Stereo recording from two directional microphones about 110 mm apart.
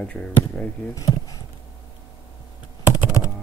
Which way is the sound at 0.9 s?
30° left (ahead or behind).